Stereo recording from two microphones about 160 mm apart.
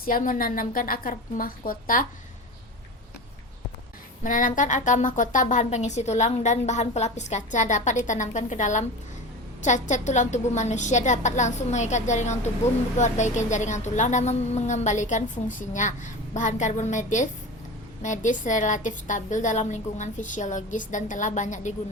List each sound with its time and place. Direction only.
0.0 s a woman's voice: 60° left (ahead or behind)
4.2 s speech: 55° left (ahead or behind)